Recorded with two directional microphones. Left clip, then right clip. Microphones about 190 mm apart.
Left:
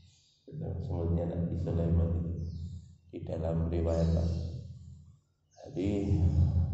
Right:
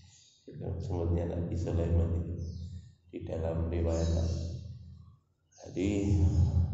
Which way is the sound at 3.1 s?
15° left (ahead or behind).